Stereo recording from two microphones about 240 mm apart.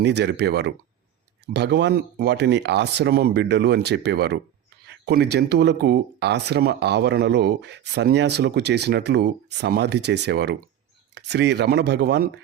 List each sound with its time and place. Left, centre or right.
0.0 s speech: right